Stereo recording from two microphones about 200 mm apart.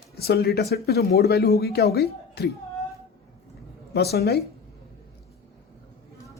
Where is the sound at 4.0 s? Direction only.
50° left (ahead or behind).